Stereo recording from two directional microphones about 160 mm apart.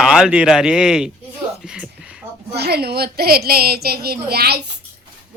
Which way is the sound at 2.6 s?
90° right.